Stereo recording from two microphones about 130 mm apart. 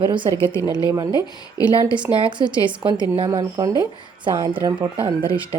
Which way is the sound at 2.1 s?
40° right (ahead or behind).